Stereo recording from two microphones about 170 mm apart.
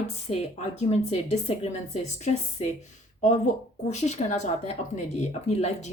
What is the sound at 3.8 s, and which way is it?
Speech, 40° left (ahead or behind).